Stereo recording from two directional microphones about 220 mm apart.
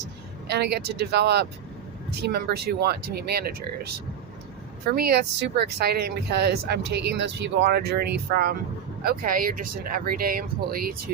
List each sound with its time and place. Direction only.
0.4 s speech: 50° right (ahead or behind)
4.9 s speech: 45° right (ahead or behind)